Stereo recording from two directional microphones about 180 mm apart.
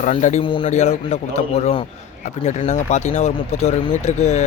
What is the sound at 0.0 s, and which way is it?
Speech, 40° left (ahead or behind).